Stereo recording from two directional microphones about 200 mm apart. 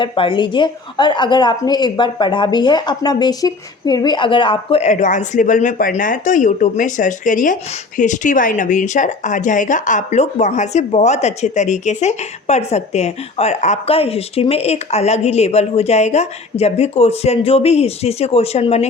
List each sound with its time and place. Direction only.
0.0 s a woman's voice: 25° left (ahead or behind)